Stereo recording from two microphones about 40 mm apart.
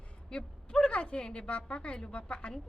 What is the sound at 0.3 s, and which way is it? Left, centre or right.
A woman's voice, left.